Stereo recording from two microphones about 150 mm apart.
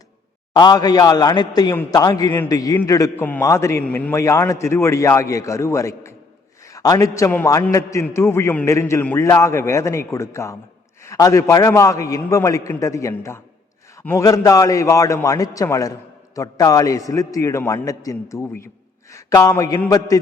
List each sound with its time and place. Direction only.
0.5 s a man's voice: 25° left (ahead or behind)